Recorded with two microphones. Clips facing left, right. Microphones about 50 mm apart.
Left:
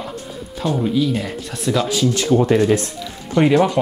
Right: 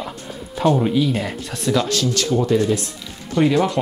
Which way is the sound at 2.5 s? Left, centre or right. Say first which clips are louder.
Left 3 dB; left.